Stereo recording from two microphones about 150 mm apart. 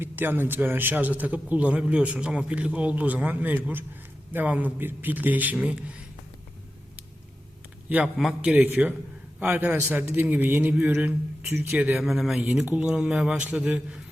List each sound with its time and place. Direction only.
0.0 s a man's voice: 15° right (ahead or behind)
7.9 s a man's voice: 5° right (ahead or behind)